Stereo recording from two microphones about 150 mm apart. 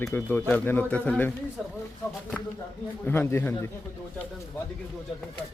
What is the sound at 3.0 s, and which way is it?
Speech, 15° left (ahead or behind).